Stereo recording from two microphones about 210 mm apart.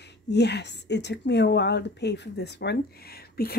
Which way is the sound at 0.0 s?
55° left (ahead or behind).